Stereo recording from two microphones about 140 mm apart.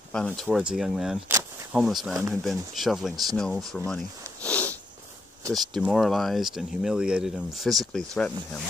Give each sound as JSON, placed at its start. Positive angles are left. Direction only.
{"t": 0.1, "sound": "speech", "side_deg": 5}
{"t": 5.4, "sound": "speech", "side_deg": -25}
{"t": 5.9, "sound": "speech", "side_deg": 0}